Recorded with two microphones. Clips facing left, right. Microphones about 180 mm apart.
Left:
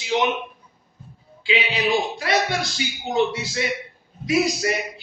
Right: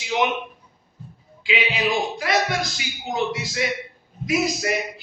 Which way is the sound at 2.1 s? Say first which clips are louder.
Even; 30° left (ahead or behind).